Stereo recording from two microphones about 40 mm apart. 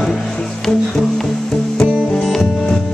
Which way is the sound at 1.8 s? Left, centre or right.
Centre.